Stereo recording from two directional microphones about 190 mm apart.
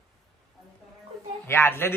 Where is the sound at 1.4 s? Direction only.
10° left (ahead or behind).